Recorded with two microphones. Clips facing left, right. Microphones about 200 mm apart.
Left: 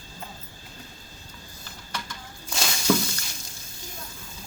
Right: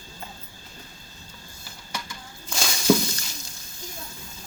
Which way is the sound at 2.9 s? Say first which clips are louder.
Right 3 dB; 15° right (ahead or behind).